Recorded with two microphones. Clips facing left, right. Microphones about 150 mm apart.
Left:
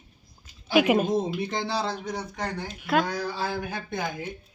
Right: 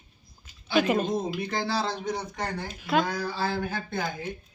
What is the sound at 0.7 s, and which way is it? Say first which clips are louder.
Speech: left 3 dB; 10° left (ahead or behind).